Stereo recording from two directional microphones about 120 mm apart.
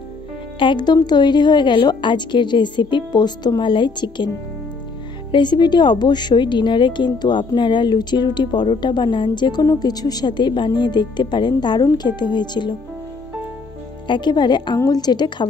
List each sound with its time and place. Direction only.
0.6 s a woman's voice: 40° left (ahead or behind)
5.3 s a woman's voice: 40° left (ahead or behind)
14.0 s a woman's voice: 40° left (ahead or behind)